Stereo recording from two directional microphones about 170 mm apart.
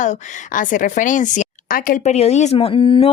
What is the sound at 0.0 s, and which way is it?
A woman's voice, 50° left (ahead or behind).